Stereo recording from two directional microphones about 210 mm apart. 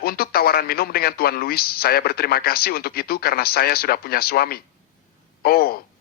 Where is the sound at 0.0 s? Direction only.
45° left (ahead or behind).